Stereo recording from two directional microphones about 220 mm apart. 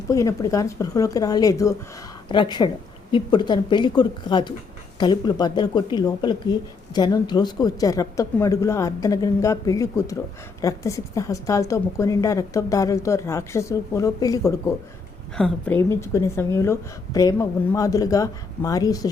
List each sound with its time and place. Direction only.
0.1 s a woman's voice: 15° left (ahead or behind)
15.4 s speech: 5° left (ahead or behind)